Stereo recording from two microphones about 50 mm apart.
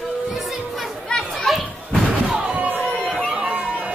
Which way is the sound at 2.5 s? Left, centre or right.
Right.